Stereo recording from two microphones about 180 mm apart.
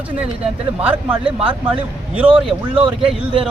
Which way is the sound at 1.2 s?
30° right (ahead or behind).